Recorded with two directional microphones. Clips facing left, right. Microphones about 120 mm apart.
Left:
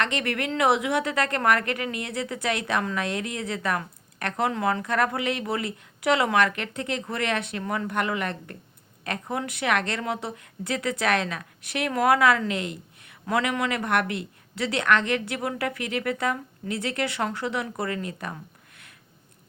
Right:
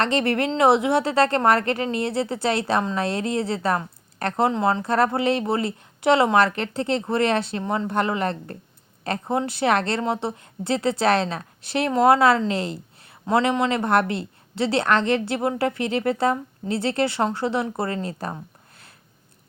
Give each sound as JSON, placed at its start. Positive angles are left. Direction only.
{"t": 0.0, "sound": "a woman's voice", "side_deg": -30}